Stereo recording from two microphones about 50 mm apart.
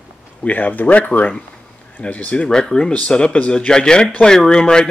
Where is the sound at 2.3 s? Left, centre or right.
Centre.